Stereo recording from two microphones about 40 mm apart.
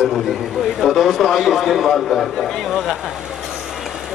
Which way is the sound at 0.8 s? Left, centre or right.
Centre.